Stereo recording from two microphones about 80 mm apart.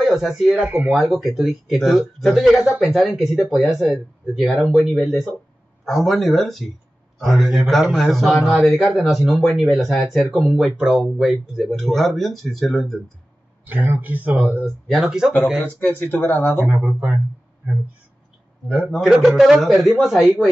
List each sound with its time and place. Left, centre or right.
0.0 s speech: centre
0.6 s speech: right
0.9 s a man's voice: centre
13.7 s speech: right
14.9 s speech: centre
15.6 s speech: left
16.7 s speech: centre
18.7 s speech: centre